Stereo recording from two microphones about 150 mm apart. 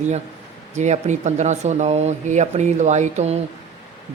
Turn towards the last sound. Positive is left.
turn(degrees=-50)  # may be behind; listen again after turning